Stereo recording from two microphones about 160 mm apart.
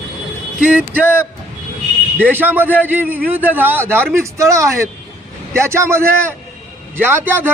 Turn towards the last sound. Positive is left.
turn(degrees=-15)  # may be behind; listen again after turning